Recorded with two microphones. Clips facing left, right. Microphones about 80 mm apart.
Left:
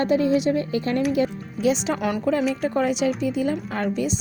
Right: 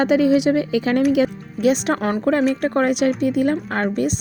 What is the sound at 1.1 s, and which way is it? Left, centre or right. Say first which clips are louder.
Speech: right 4 dB; right.